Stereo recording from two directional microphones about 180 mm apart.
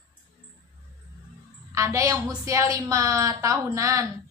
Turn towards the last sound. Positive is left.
turn(degrees=-15)  # may be behind; listen again after turning